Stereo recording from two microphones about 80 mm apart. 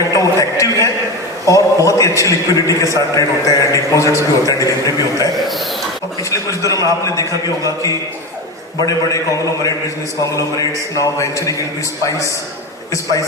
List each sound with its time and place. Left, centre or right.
0.1 s a sound: left
1.5 s a man's voice: left
6.7 s a man's voice: left
8.9 s a man's voice: left